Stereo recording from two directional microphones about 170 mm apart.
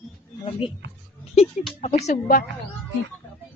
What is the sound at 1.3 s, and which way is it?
Speech, 35° left (ahead or behind).